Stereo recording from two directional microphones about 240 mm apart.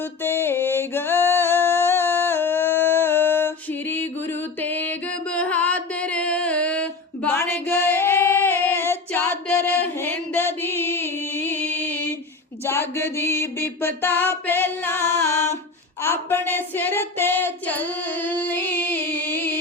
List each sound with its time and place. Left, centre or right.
0.2 s music: centre
16.0 s female singing: centre